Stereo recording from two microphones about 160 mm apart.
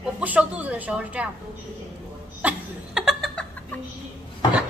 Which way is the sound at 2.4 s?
5° right (ahead or behind).